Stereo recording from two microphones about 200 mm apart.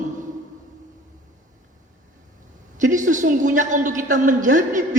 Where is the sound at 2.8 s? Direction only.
40° right (ahead or behind).